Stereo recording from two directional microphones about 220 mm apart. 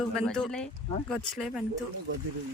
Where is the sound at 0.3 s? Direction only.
5° left (ahead or behind).